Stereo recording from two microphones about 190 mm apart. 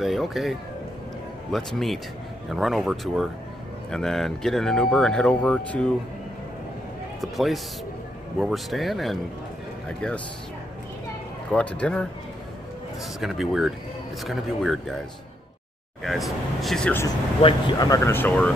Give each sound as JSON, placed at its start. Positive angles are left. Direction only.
{"t": 0.0, "sound": "speech", "side_deg": 0}
{"t": 7.2, "sound": "speech", "side_deg": 0}
{"t": 11.5, "sound": "speech", "side_deg": 5}
{"t": 13.2, "sound": "speech", "side_deg": 0}
{"t": 16.0, "sound": "speech", "side_deg": 0}
{"t": 17.4, "sound": "speech", "side_deg": 25}